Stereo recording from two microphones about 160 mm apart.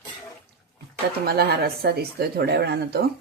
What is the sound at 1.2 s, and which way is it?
Speech, 80° right.